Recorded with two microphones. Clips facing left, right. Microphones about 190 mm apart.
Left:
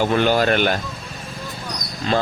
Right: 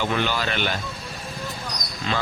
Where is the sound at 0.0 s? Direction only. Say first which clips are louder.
Left 7 dB; 45° left (ahead or behind).